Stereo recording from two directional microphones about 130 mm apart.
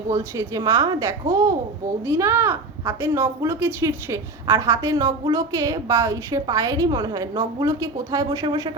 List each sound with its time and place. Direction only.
0.1 s a woman's voice: 25° right (ahead or behind)